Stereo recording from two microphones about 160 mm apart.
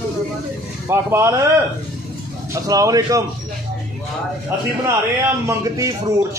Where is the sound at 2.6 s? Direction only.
20° right (ahead or behind).